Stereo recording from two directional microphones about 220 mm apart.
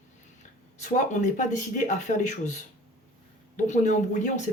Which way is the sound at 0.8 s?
35° left (ahead or behind).